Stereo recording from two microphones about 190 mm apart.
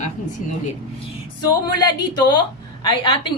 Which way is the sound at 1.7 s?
20° left (ahead or behind).